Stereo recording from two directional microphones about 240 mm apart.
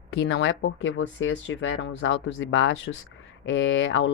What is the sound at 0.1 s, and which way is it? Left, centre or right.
Speech, left.